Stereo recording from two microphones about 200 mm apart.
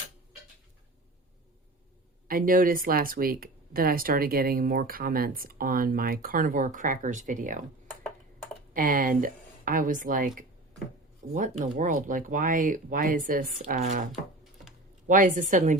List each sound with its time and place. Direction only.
2.2 s speech: 45° right (ahead or behind)
8.7 s speech: 45° right (ahead or behind)